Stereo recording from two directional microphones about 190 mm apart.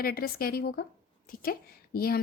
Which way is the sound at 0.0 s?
50° left (ahead or behind).